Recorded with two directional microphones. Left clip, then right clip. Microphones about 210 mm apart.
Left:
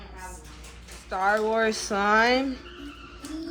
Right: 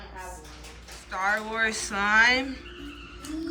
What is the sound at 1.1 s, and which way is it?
Speech, 25° left (ahead or behind).